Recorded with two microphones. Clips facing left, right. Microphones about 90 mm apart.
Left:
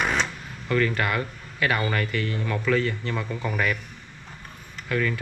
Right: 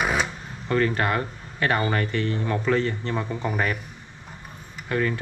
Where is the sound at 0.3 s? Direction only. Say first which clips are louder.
Right 1 dB; 20° right (ahead or behind).